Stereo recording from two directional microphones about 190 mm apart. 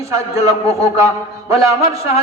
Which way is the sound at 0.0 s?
15° right (ahead or behind).